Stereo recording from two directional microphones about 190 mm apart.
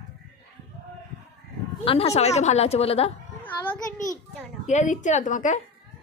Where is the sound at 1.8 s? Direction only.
30° left (ahead or behind).